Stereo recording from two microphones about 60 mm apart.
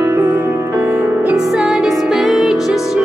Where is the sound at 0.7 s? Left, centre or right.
Right.